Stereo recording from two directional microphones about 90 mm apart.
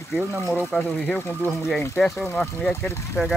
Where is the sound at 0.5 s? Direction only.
5° left (ahead or behind).